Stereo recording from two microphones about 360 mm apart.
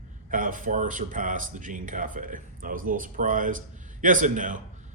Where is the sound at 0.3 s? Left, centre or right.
Right.